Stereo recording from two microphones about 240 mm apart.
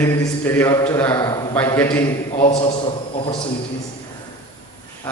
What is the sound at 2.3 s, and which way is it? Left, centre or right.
A man's voice, left.